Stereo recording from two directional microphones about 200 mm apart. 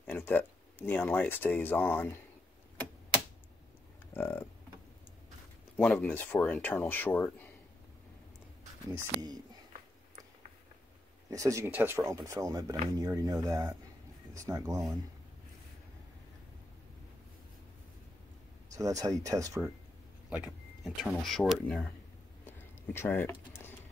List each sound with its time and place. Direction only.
0.0 s speech: 10° left (ahead or behind)
4.1 s speech: 10° left (ahead or behind)
5.8 s speech: 5° left (ahead or behind)
11.2 s speech: 15° right (ahead or behind)
18.7 s speech: 15° right (ahead or behind)
20.2 s speech: 5° right (ahead or behind)
22.5 s a sound: 10° left (ahead or behind)